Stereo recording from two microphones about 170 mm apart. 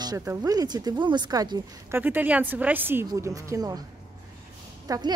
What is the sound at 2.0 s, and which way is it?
Speech, 10° right (ahead or behind).